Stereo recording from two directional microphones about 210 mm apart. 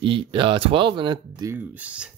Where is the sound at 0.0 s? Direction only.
25° right (ahead or behind).